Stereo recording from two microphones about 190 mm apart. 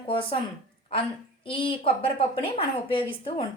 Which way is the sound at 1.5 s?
25° left (ahead or behind).